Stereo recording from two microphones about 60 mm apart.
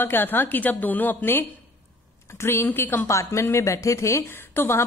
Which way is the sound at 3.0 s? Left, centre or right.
Left.